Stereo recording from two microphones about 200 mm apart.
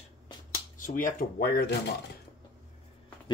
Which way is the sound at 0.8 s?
40° left (ahead or behind).